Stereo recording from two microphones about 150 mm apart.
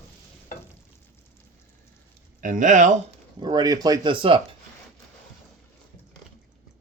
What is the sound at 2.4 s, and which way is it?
Speech, 60° right (ahead or behind).